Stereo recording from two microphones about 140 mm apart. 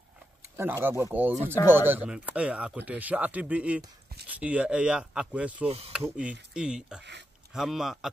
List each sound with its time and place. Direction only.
0.6 s speech: 15° right (ahead or behind)
5.7 s speech: 45° right (ahead or behind)
5.9 s a man's voice: 10° right (ahead or behind)